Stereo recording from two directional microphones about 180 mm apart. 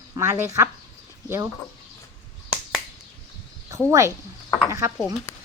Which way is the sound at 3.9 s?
15° right (ahead or behind).